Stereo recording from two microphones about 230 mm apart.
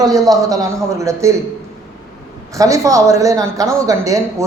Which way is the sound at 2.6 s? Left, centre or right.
Centre.